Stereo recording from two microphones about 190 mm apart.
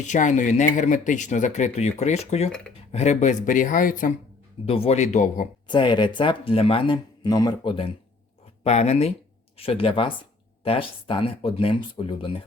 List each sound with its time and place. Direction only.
0.0 s speech: 40° left (ahead or behind)
4.6 s speech: 30° left (ahead or behind)
5.6 s speech: 25° left (ahead or behind)